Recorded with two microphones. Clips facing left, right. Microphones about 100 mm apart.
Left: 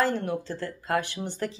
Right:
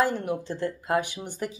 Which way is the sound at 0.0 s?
15° right (ahead or behind).